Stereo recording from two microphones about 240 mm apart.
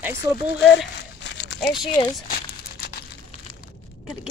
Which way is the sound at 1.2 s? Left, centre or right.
Left.